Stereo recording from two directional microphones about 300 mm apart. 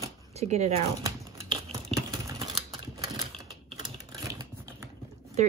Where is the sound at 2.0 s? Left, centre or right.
Centre.